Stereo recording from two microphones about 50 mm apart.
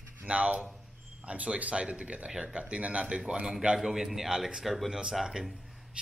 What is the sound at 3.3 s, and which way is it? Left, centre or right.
Speech, centre.